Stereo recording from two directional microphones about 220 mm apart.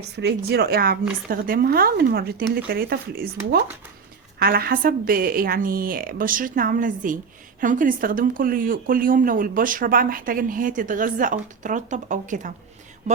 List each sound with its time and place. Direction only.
0.0 s speech: 50° right (ahead or behind)